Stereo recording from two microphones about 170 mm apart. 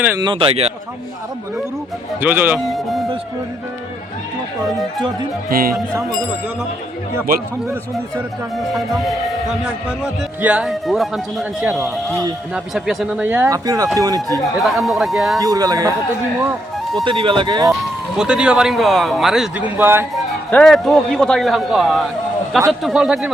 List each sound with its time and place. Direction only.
0.2 s speech: 30° right (ahead or behind)
2.2 s a man's voice: 10° right (ahead or behind)
5.5 s speech: 60° right (ahead or behind)
7.3 s speech: 55° right (ahead or behind)
8.7 s a man's voice: centre (ahead or behind)
13.2 s speech: 10° right (ahead or behind)
14.8 s a man's voice: centre (ahead or behind)
15.4 s speech: 20° right (ahead or behind)
17.0 s speech: 30° right (ahead or behind)
18.2 s a man's voice: 5° right (ahead or behind)
20.5 s a man's voice: 5° left (ahead or behind)